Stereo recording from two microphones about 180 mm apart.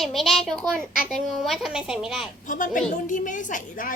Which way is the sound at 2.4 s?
45° left (ahead or behind).